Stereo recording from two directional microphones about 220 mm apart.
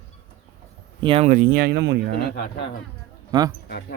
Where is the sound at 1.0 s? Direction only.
25° right (ahead or behind); by 2.0 s 50° right (ahead or behind).